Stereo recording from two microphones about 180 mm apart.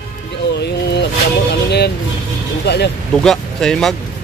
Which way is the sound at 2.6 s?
65° left (ahead or behind).